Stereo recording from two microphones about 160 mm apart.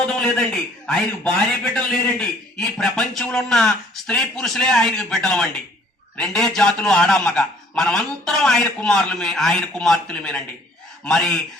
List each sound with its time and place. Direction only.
0.0 s a man's voice: 5° left (ahead or behind)